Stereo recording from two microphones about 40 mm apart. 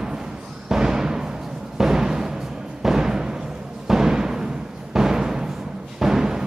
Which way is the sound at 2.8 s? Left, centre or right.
Centre.